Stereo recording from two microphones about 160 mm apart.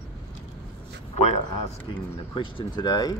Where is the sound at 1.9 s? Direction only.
30° left (ahead or behind).